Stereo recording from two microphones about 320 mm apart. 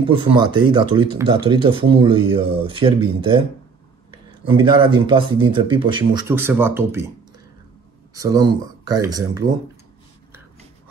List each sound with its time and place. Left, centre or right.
0.1 s speech: centre
4.5 s speech: centre
8.1 s speech: centre